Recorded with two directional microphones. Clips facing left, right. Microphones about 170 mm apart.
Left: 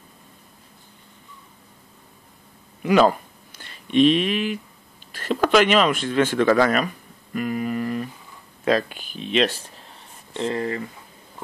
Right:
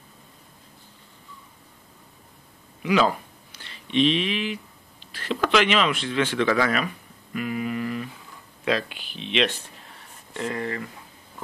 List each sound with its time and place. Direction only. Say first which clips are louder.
2.8 s speech: left 4 dB; 50° left (ahead or behind)
7.3 s a sound: left 3 dB; 40° left (ahead or behind)
8.6 s speech: left 5 dB; 45° left (ahead or behind)
10.3 s speech: left 4 dB; 30° left (ahead or behind)